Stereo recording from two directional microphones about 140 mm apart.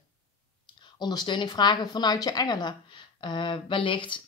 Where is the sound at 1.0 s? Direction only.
30° left (ahead or behind).